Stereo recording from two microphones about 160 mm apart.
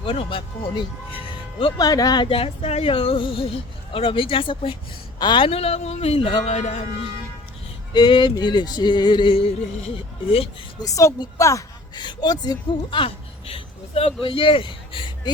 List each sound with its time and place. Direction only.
0.0 s speech: 35° left (ahead or behind)
7.9 s music: 30° left (ahead or behind)
9.9 s speech: 35° left (ahead or behind)
10.8 s a woman's voice: 20° left (ahead or behind)